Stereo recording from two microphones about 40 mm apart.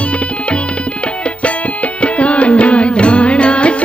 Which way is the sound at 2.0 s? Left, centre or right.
Left.